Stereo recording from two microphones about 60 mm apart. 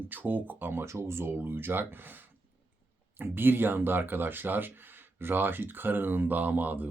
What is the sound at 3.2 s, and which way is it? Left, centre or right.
Speech, right.